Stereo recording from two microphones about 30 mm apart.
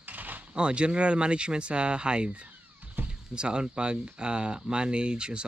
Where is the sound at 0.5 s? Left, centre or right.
Right.